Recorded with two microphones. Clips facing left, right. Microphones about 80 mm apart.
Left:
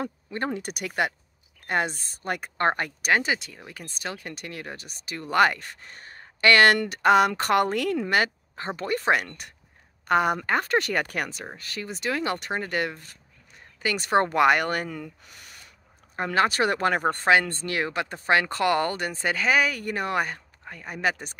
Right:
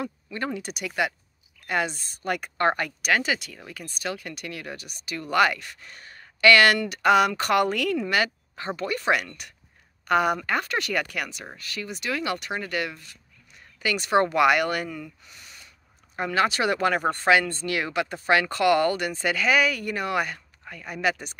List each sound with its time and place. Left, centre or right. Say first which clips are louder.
0.0 s speech: left 1 dB; left
0.6 s speech: even; left